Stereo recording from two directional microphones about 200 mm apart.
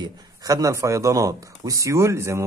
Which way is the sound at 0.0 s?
15° right (ahead or behind).